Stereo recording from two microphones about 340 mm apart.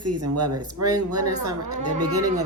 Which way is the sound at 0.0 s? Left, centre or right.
Right.